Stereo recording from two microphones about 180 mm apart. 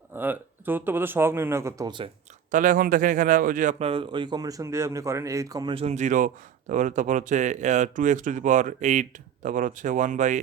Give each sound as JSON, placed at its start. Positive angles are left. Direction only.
{"t": 0.2, "sound": "speech", "side_deg": -10}
{"t": 2.5, "sound": "a man's voice", "side_deg": -50}
{"t": 5.7, "sound": "speech", "side_deg": -40}